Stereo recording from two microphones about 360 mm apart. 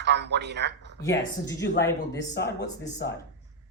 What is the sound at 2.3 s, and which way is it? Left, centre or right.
Speech, left.